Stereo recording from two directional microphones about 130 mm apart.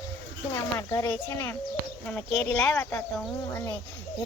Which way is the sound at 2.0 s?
10° left (ahead or behind).